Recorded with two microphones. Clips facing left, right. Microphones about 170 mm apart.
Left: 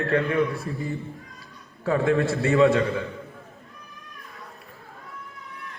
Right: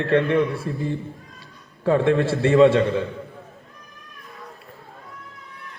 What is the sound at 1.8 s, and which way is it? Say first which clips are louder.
A man's voice: right 3 dB; 30° right (ahead or behind).